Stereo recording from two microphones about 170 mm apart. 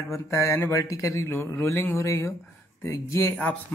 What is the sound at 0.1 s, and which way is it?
Speech, 15° left (ahead or behind).